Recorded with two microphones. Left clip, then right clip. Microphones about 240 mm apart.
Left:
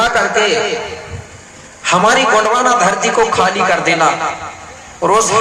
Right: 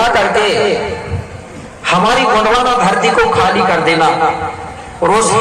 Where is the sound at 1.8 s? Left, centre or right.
Left.